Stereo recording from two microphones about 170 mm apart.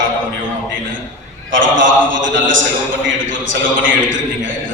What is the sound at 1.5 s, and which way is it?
A man's voice, 90° right.